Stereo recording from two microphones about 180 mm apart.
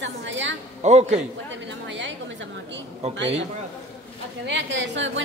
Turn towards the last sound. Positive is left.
turn(degrees=-90)